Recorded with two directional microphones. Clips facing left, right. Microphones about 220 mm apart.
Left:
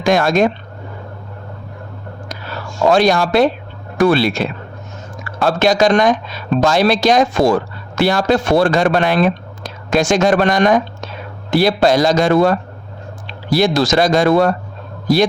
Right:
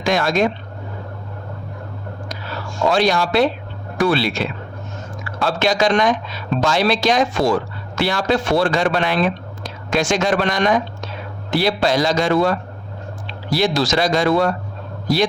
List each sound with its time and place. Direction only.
0.0 s speech: 50° left (ahead or behind)
2.9 s a man's voice: 50° left (ahead or behind)